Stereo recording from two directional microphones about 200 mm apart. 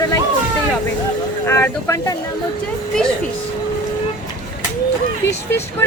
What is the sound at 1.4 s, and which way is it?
Speech, 10° left (ahead or behind).